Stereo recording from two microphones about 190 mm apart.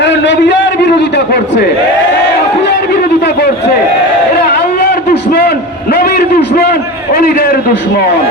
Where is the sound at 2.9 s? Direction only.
60° left (ahead or behind).